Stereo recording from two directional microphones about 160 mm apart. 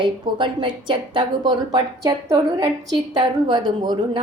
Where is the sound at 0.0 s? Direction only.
30° right (ahead or behind).